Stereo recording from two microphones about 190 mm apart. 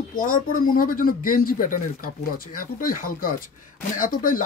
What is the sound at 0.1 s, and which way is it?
Speech, 45° left (ahead or behind).